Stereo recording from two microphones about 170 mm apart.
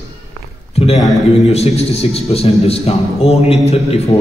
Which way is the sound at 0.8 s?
35° left (ahead or behind).